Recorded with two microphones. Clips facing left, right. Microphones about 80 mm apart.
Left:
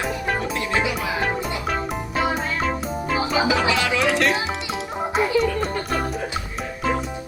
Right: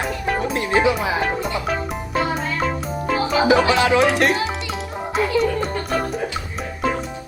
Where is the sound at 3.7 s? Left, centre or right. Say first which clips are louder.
Right 5 dB; right.